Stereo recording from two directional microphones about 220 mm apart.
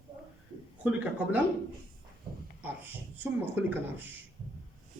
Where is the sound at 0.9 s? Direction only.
5° right (ahead or behind).